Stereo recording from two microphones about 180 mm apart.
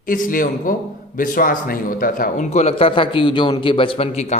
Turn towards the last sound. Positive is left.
turn(degrees=40)  # may be behind; listen again after turning